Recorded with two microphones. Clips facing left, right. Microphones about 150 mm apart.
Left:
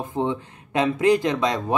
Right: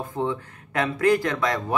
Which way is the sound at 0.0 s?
20° left (ahead or behind).